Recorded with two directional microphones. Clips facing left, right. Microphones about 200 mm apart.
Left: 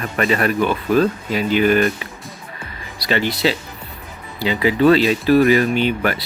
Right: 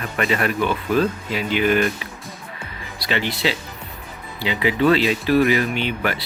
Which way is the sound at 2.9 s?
40° left (ahead or behind).